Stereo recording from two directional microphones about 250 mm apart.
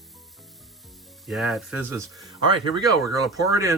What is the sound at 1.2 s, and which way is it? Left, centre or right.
Speech, centre.